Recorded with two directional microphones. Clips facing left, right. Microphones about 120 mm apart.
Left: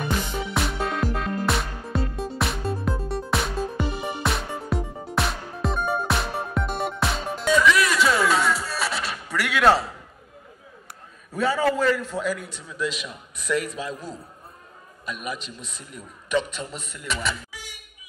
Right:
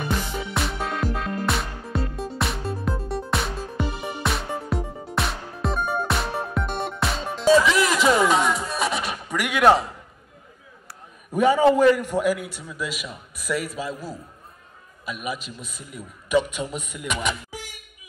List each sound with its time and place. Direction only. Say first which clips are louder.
0.6 s music: left 1 dB; centre (ahead or behind)
7.4 s music: right 2 dB; 30° right (ahead or behind)
11.3 s a man's voice: right 5 dB; 15° right (ahead or behind)
17.5 s a sound: right 5 dB; 45° right (ahead or behind)